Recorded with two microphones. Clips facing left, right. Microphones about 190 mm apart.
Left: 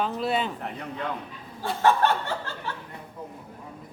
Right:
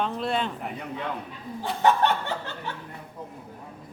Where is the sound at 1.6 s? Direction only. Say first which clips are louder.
Even; 20° right (ahead or behind).